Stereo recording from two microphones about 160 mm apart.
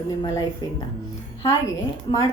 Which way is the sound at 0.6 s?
25° left (ahead or behind).